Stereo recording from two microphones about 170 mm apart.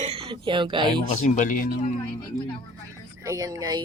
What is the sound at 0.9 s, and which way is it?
Speech, 45° left (ahead or behind).